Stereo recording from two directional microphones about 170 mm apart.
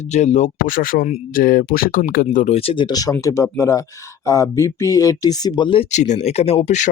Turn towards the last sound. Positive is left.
turn(degrees=45)  # may be behind; listen again after turning